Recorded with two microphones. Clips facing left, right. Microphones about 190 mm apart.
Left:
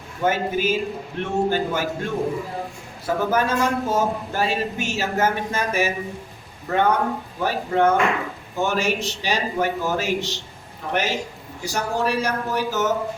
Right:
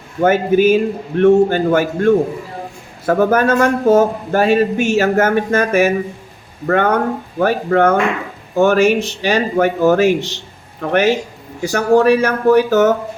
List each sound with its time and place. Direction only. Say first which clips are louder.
0.2 s speech: right 10 dB; 60° right (ahead or behind)